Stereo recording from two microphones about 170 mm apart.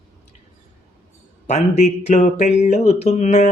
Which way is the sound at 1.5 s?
40° left (ahead or behind).